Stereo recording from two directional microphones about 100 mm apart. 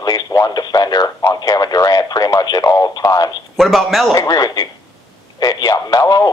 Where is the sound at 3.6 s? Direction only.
Centre (ahead or behind).